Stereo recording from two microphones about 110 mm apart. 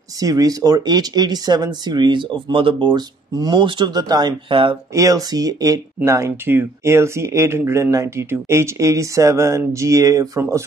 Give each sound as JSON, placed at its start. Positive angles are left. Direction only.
{"t": 0.2, "sound": "speech", "side_deg": -35}